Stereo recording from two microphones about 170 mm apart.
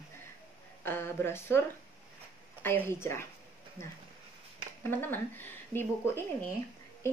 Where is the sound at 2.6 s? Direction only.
10° left (ahead or behind).